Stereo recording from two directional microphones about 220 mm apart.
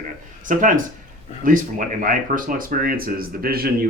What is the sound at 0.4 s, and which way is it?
Speech, 35° right (ahead or behind).